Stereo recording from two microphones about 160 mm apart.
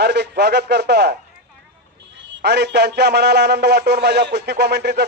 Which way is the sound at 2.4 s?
90° right.